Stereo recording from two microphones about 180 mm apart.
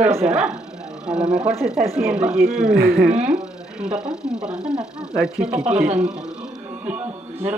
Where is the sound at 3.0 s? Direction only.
5° right (ahead or behind).